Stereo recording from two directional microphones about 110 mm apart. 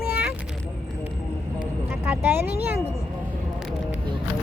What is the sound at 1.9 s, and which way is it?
Vehicle, 20° right (ahead or behind).